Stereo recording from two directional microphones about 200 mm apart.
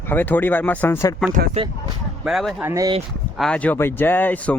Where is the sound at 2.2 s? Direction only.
Centre (ahead or behind).